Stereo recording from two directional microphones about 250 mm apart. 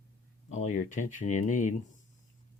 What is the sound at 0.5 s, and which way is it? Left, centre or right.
Speech, left.